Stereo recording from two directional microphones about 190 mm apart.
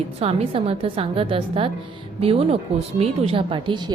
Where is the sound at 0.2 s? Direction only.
30° right (ahead or behind).